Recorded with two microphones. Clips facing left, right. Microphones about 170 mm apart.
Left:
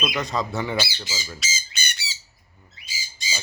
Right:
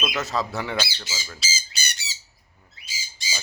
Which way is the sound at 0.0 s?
Centre (ahead or behind).